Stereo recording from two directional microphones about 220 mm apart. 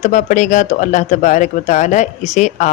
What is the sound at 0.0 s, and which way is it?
Speech, 35° left (ahead or behind).